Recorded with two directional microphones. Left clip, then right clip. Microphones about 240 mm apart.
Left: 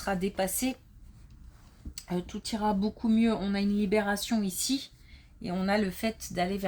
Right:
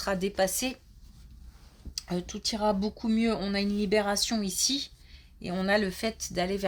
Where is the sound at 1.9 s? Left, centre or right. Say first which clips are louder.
Right 1 dB; right.